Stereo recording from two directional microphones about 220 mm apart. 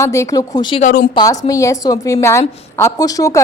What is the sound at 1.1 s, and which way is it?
A woman's voice, 15° left (ahead or behind).